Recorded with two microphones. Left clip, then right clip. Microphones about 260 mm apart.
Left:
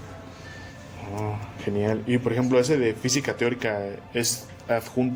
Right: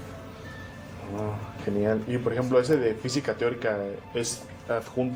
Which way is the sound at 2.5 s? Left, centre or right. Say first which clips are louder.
Left 1 dB; left.